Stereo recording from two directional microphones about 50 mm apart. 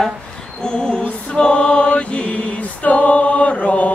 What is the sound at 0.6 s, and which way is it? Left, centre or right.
Female singing, centre.